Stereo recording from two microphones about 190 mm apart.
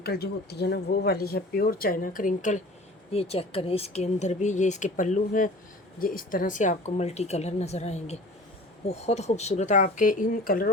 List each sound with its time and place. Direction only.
0.0 s speech: 55° left (ahead or behind)